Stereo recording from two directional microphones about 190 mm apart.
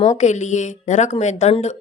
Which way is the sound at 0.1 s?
40° left (ahead or behind).